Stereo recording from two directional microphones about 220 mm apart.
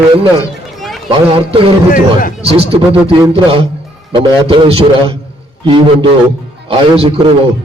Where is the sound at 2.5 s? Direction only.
25° right (ahead or behind).